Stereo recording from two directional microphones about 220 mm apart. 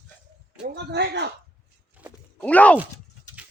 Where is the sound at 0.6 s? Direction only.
50° right (ahead or behind).